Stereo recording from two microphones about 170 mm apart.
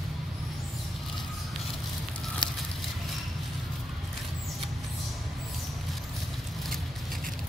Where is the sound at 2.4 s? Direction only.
25° left (ahead or behind).